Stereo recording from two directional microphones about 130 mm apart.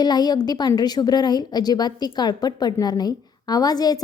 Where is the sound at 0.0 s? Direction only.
30° left (ahead or behind).